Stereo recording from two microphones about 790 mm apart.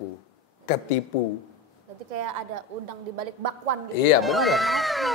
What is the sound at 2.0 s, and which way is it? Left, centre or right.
A woman's voice, right.